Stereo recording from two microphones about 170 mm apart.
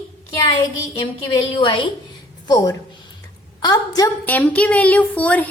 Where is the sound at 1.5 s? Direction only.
30° left (ahead or behind).